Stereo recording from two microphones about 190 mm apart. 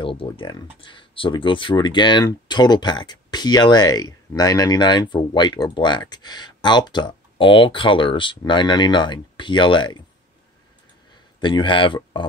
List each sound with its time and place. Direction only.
0.0 s speech: 25° left (ahead or behind)
11.4 s speech: 25° left (ahead or behind)